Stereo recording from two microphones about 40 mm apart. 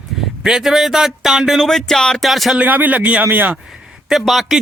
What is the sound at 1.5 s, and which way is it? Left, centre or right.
Speech, centre.